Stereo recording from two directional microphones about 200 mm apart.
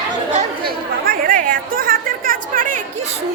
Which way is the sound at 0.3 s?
45° right (ahead or behind).